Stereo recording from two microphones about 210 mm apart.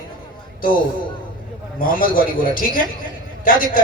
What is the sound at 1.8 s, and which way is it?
A man's voice, 40° left (ahead or behind).